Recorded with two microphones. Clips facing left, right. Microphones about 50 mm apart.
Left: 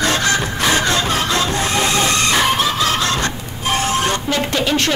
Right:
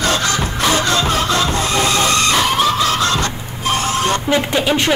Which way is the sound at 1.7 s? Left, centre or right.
Left.